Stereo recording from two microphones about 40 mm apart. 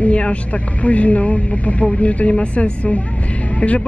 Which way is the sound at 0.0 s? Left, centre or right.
Left.